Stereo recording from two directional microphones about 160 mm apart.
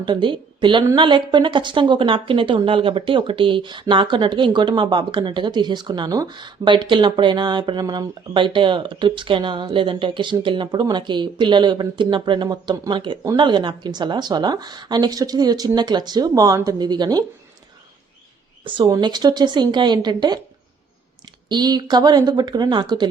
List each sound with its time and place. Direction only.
0.0 s a woman's voice: 30° right (ahead or behind)
18.6 s speech: 30° right (ahead or behind)
21.5 s speech: 25° right (ahead or behind)